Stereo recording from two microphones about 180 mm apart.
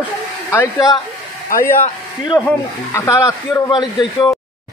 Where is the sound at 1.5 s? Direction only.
50° left (ahead or behind).